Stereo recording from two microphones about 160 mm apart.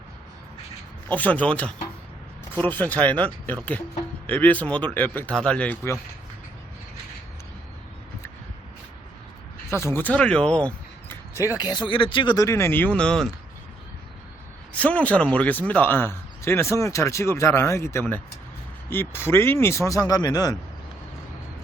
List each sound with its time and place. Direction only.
1.1 s speech: 10° left (ahead or behind)
9.7 s speech: 15° left (ahead or behind)
11.6 s speech: 25° left (ahead or behind); by 13.2 s 5° left (ahead or behind)
14.8 s speech: 10° left (ahead or behind)